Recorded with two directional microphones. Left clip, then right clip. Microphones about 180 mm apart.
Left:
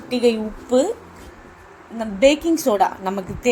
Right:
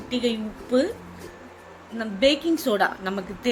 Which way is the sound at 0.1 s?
20° left (ahead or behind).